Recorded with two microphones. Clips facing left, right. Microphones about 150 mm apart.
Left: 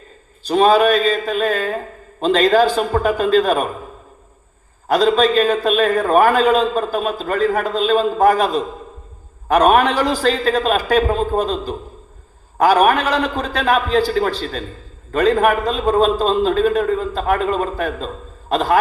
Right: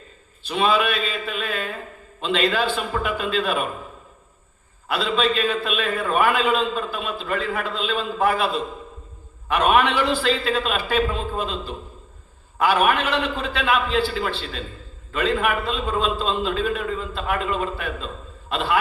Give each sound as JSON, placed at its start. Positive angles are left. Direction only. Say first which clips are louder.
{"t": 0.4, "sound": "a man's voice", "louder": "left 8 dB", "side_deg": 40}
{"t": 4.9, "sound": "a man's voice", "louder": "left 8 dB", "side_deg": 40}